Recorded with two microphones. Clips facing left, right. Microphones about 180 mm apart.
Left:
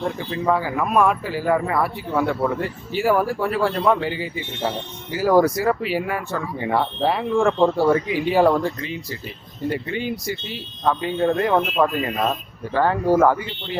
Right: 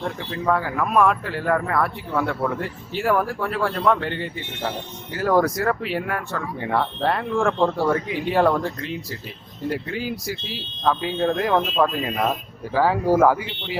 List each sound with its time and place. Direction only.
0.0 s speech: 5° left (ahead or behind)